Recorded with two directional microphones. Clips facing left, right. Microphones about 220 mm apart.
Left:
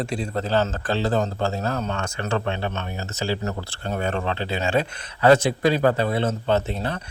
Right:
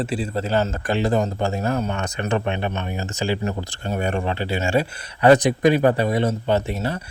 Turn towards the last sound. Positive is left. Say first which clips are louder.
# right 1 dB
turn(degrees=-10)  # may be behind; listen again after turning